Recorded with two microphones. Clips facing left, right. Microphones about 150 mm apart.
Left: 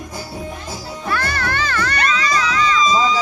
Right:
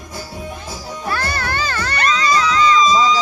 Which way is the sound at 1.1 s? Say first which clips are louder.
Left 1 dB; 30° right (ahead or behind).